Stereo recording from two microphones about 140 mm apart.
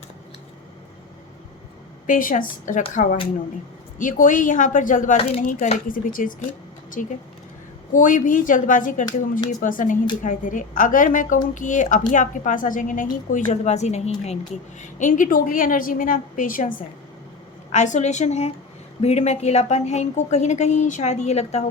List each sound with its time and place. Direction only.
2.0 s a woman's voice: 75° left (ahead or behind)
5.1 s a woman's voice: 45° left (ahead or behind)
5.4 s a woman's voice: 65° left (ahead or behind)
14.8 s a woman's voice: 65° left (ahead or behind)
17.7 s a woman's voice: 60° left (ahead or behind)